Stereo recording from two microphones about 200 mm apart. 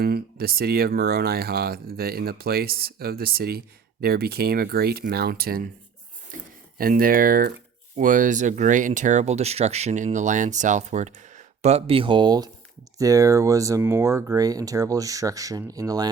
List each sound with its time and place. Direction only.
0.0 s speech: 50° right (ahead or behind)
6.7 s speech: 45° right (ahead or behind); by 16.0 s 20° right (ahead or behind)